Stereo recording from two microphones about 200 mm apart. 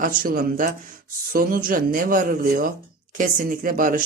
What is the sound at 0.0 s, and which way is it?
Speech, 45° right (ahead or behind).